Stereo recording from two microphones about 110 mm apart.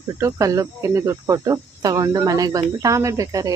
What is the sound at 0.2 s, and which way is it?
Speech, 30° right (ahead or behind).